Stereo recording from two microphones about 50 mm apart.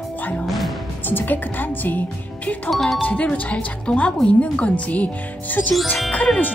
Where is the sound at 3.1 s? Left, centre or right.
Left.